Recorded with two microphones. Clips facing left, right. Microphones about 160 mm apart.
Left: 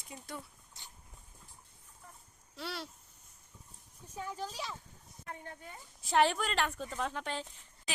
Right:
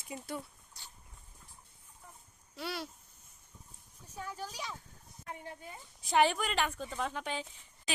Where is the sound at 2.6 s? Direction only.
5° right (ahead or behind).